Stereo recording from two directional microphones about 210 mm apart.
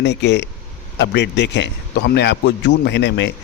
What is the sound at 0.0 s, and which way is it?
A man's voice, 55° left (ahead or behind).